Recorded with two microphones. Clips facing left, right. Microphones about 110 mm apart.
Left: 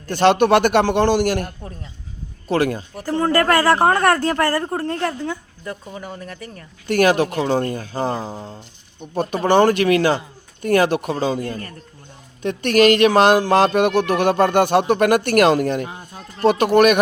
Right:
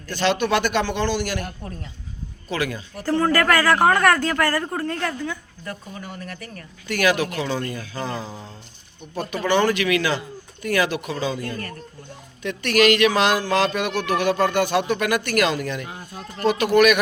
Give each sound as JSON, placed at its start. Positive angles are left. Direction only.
{"t": 0.1, "sound": "a man's voice", "side_deg": 55}
{"t": 2.5, "sound": "speech", "side_deg": 50}
{"t": 3.0, "sound": "speech", "side_deg": 20}
{"t": 6.8, "sound": "speech", "side_deg": 50}